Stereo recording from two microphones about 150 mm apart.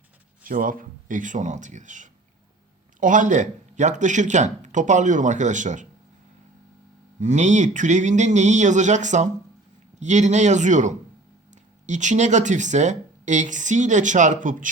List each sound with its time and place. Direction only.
0.4 s speech: 65° right (ahead or behind)
7.2 s speech: 50° right (ahead or behind)